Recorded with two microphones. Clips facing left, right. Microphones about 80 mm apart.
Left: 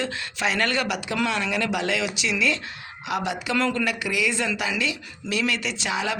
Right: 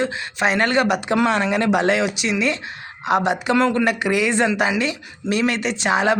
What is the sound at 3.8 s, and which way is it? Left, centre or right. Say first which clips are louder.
Speech: right 6 dB; right.